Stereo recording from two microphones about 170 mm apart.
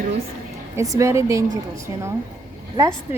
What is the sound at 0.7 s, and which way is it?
Speech, 20° right (ahead or behind).